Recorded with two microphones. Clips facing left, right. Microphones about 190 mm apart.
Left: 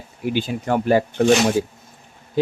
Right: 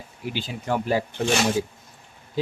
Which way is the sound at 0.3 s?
55° left (ahead or behind).